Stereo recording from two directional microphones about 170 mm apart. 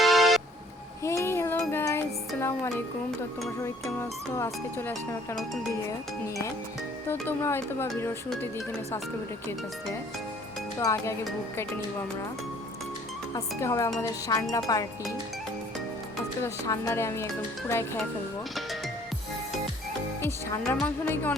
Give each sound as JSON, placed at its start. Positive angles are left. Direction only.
{"t": 0.0, "sound": "vehicle", "side_deg": 0}
{"t": 1.0, "sound": "music", "side_deg": 15}
{"t": 3.6, "sound": "speech", "side_deg": 15}
{"t": 7.1, "sound": "speech", "side_deg": 15}
{"t": 10.8, "sound": "speech", "side_deg": 20}
{"t": 13.3, "sound": "speech", "side_deg": 15}
{"t": 16.4, "sound": "speech", "side_deg": 15}
{"t": 20.2, "sound": "speech", "side_deg": 20}